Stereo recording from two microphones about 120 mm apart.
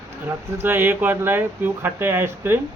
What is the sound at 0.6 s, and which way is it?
Speech, 15° right (ahead or behind).